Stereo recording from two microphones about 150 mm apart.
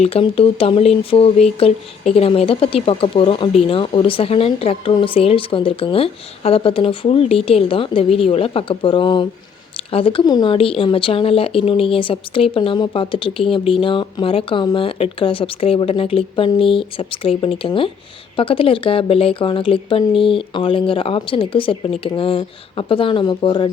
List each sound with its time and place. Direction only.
0.0 s speech: 40° left (ahead or behind)